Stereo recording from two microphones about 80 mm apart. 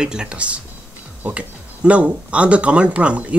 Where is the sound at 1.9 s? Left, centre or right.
Centre.